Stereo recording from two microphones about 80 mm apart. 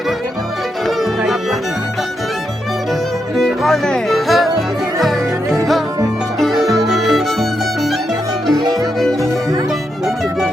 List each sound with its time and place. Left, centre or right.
1.2 s music: centre
3.3 s music: centre
8.6 s music: right
9.0 s music: centre